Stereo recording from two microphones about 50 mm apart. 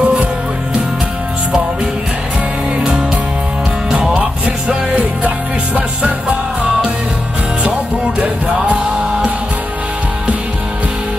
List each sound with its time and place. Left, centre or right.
0.0 s music: right
3.9 s music: centre
4.6 s music: right
8.2 s music: right